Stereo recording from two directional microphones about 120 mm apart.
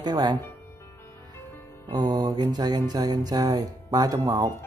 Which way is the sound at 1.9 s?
35° right (ahead or behind).